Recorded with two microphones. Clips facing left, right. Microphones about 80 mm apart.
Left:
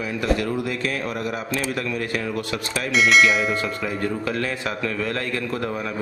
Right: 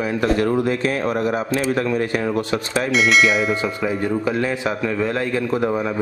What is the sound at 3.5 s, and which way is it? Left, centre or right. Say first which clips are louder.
Speech: right 4 dB; centre.